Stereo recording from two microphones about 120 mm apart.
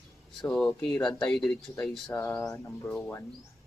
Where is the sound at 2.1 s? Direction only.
25° left (ahead or behind).